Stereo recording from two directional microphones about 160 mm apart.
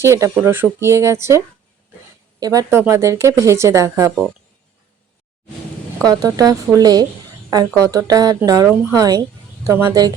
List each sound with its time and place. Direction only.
0.0 s speech: 15° right (ahead or behind)
2.4 s speech: 20° right (ahead or behind)
6.1 s speech: 25° right (ahead or behind)